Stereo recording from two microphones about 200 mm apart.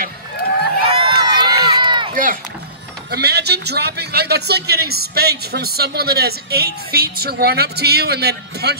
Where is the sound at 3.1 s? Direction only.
55° right (ahead or behind).